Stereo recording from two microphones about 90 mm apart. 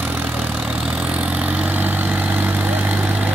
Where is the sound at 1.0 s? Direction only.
15° right (ahead or behind).